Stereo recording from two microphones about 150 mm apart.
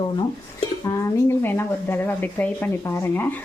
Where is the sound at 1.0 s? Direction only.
15° left (ahead or behind).